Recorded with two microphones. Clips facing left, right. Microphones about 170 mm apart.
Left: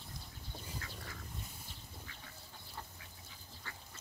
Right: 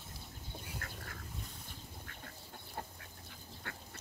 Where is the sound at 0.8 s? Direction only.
50° right (ahead or behind).